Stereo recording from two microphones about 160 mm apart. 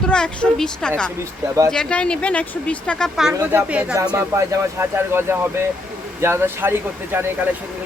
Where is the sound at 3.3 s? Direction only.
10° right (ahead or behind).